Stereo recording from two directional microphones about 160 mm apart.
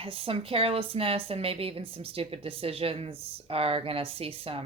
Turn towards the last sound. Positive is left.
turn(degrees=-35)  # may be behind; listen again after turning